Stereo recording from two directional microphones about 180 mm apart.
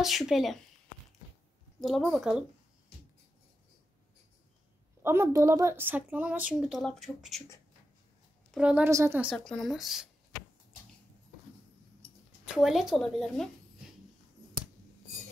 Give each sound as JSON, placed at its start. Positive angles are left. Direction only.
{"t": 0.0, "sound": "speech", "side_deg": 0}
{"t": 1.8, "sound": "speech", "side_deg": 0}
{"t": 5.0, "sound": "a woman's voice", "side_deg": -15}
{"t": 8.5, "sound": "a woman's voice", "side_deg": -5}
{"t": 9.3, "sound": "speech", "side_deg": 5}
{"t": 12.5, "sound": "speech", "side_deg": 0}